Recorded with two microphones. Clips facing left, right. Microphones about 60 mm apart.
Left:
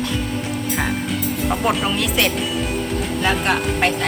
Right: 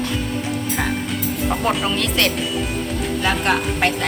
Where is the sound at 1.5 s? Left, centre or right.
Centre.